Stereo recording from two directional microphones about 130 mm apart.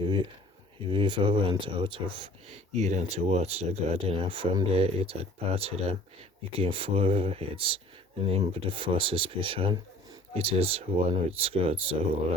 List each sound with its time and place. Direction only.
0.9 s speech: 40° right (ahead or behind)